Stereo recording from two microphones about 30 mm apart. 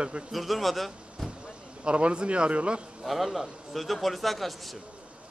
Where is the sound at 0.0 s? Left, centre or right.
Right.